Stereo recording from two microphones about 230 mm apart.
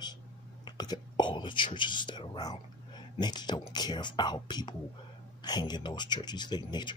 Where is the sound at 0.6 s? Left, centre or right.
Centre.